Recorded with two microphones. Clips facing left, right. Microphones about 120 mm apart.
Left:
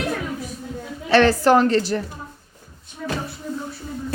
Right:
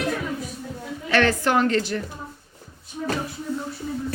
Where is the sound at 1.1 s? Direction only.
35° left (ahead or behind).